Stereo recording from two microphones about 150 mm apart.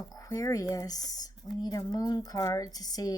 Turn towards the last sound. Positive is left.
turn(degrees=25)  # may be behind; listen again after turning